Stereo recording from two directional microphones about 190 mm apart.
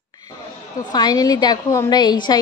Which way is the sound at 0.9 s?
20° left (ahead or behind).